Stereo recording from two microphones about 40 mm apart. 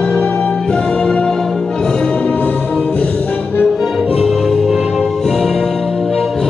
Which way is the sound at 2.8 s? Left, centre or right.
Left.